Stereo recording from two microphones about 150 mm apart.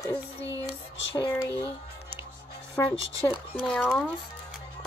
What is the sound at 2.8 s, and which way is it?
Speech, 15° left (ahead or behind).